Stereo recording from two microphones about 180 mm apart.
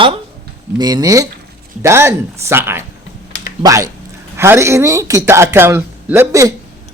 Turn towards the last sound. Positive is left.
turn(degrees=-15)  # may be behind; listen again after turning